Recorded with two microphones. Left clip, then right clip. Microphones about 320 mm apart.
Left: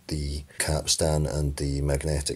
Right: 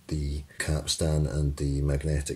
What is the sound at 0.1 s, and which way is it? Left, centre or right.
Speech, centre.